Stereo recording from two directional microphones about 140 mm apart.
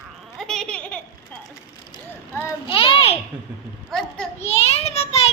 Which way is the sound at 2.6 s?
40° left (ahead or behind).